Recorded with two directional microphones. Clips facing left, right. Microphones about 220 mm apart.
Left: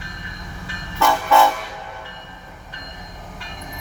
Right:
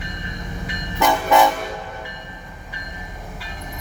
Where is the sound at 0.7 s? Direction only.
20° right (ahead or behind).